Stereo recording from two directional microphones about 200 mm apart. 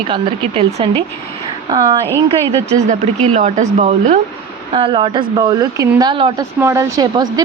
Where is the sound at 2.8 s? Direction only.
35° right (ahead or behind).